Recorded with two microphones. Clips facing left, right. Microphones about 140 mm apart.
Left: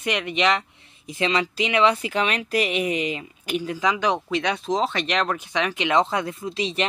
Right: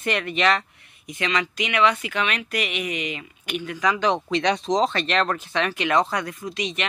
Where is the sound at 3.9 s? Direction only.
10° left (ahead or behind).